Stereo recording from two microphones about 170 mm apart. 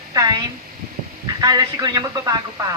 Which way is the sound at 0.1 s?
20° right (ahead or behind).